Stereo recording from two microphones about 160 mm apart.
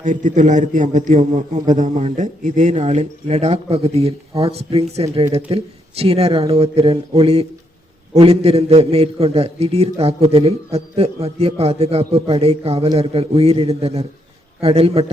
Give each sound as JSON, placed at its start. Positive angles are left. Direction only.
{"t": 0.0, "sound": "a man's voice", "side_deg": -55}